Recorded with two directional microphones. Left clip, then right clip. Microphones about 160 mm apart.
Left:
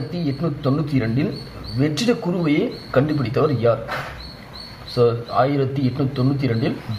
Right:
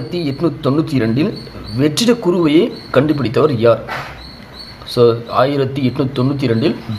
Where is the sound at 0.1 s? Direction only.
40° right (ahead or behind).